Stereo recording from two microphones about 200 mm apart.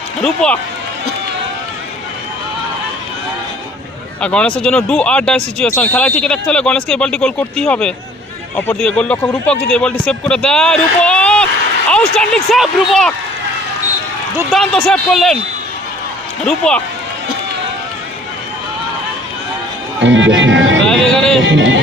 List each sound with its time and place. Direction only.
0.2 s speech: 5° left (ahead or behind)
4.2 s speech: 5° left (ahead or behind)
14.5 s speech: centre (ahead or behind)
16.4 s speech: 5° left (ahead or behind)
20.0 s music: 65° right (ahead or behind)
20.8 s a sound: 5° left (ahead or behind)
21.3 s music: 70° right (ahead or behind)